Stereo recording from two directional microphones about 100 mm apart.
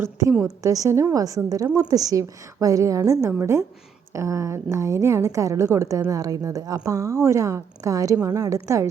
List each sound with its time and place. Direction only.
0.4 s a woman's voice: 35° right (ahead or behind)